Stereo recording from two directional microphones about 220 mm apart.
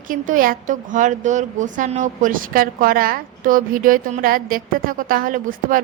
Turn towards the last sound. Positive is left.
turn(degrees=-40)  # may be behind; listen again after turning